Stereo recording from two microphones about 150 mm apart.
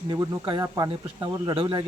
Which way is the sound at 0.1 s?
30° right (ahead or behind).